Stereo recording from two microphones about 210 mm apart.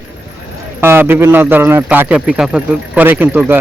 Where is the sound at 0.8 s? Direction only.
10° right (ahead or behind).